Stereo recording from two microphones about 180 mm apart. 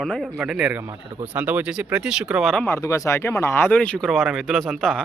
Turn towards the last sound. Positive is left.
turn(degrees=0)  # may be behind; listen again after turning